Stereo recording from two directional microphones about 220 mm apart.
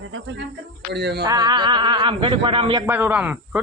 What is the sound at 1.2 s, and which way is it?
Speech, 20° right (ahead or behind).